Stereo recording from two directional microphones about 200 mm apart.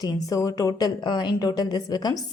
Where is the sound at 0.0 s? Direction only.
15° left (ahead or behind).